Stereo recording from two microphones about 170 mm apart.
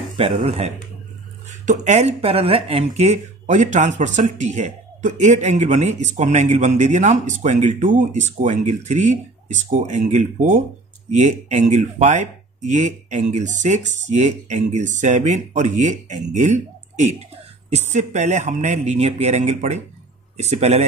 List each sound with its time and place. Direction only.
0.2 s speech: 35° right (ahead or behind)